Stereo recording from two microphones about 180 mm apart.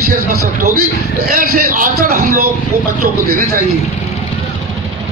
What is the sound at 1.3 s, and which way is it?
A man's voice, 50° right (ahead or behind).